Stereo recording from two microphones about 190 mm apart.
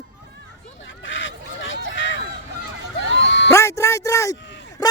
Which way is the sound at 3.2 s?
70° left (ahead or behind).